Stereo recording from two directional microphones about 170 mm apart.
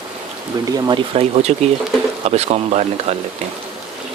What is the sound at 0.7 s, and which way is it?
Speech, 25° right (ahead or behind).